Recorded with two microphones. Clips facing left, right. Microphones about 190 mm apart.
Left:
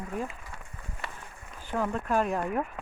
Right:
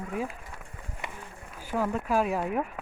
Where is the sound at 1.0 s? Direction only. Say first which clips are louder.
Right 2 dB; 10° right (ahead or behind).